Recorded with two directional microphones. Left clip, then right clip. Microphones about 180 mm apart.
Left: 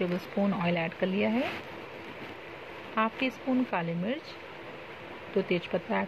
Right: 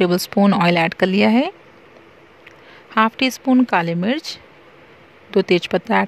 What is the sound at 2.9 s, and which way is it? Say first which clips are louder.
Speech: right 12 dB; 90° right.